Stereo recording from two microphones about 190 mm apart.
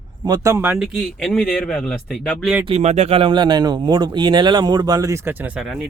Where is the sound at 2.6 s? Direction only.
35° right (ahead or behind).